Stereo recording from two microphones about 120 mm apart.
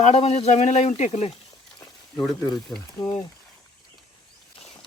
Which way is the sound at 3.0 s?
40° left (ahead or behind).